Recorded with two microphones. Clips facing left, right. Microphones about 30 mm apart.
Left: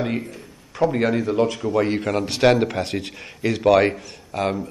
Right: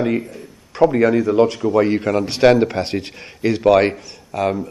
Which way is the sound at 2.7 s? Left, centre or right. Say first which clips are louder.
Right 3 dB; right.